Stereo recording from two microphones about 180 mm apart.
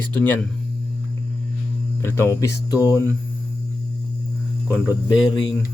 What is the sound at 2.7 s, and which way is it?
Speech, 15° right (ahead or behind).